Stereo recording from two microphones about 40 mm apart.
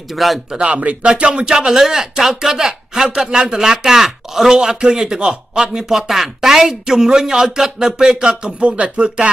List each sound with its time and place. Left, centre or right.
0.1 s speech: centre
0.7 s speech: right
1.7 s speech: centre
5.9 s speech: centre; by 8.5 s right
8.5 s speech: right